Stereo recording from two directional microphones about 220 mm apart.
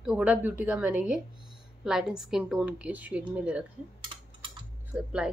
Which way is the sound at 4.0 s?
20° right (ahead or behind).